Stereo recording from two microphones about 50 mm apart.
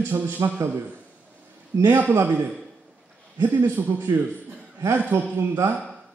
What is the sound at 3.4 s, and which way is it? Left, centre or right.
Speech, right.